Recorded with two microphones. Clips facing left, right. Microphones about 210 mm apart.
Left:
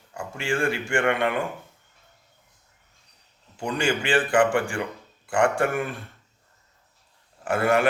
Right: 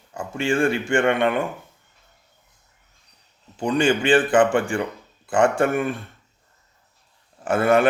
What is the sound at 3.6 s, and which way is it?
A man's voice, 20° right (ahead or behind).